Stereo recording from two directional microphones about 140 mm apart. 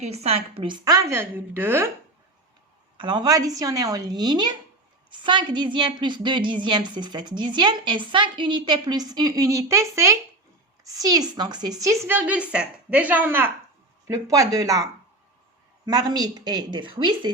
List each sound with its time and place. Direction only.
0.0 s a woman's voice: 50° right (ahead or behind); by 1.9 s 15° right (ahead or behind)
3.0 s a woman's voice: 30° right (ahead or behind); by 13.5 s 15° right (ahead or behind)
14.1 s a woman's voice: 25° right (ahead or behind)
15.9 s a woman's voice: 30° right (ahead or behind)